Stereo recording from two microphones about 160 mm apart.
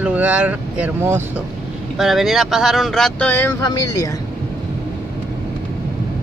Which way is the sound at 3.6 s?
25° left (ahead or behind).